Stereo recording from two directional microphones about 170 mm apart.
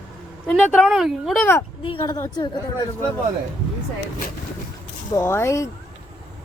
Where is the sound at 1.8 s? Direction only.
30° left (ahead or behind).